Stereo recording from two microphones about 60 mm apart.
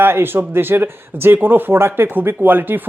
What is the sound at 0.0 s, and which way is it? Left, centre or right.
Speech, right.